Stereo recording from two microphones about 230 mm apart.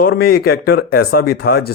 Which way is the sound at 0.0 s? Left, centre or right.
Left.